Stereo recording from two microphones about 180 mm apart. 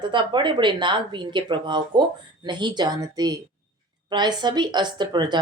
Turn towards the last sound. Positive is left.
turn(degrees=-25)  # may be behind; listen again after turning